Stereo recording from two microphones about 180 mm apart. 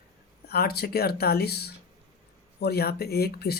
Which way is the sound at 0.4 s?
60° left (ahead or behind).